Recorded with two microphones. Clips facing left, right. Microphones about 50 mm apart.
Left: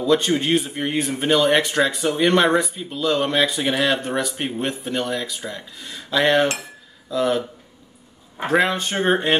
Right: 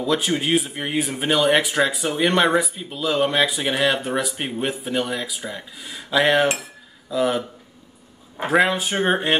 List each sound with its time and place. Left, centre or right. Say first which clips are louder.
0.0 s speech: left 3 dB; centre